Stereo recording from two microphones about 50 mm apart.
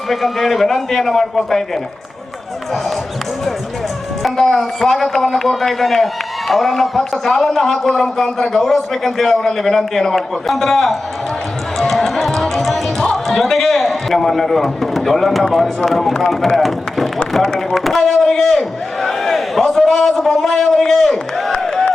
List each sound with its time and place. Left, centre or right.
0.1 s a man's voice: centre
4.2 s a man's voice: centre
11.8 s music: centre
16.6 s a man's voice: centre